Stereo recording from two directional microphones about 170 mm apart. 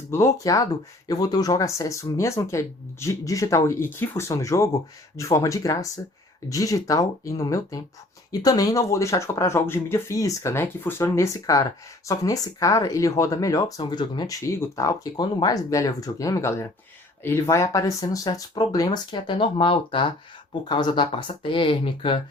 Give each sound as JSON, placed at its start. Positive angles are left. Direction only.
{"t": 0.1, "sound": "speech", "side_deg": 15}